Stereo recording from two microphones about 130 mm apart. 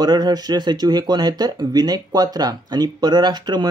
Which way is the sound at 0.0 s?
30° right (ahead or behind).